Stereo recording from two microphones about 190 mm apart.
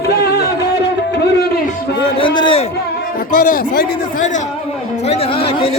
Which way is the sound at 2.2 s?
25° left (ahead or behind).